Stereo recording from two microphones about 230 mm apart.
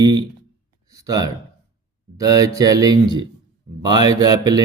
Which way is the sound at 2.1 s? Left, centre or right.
Centre.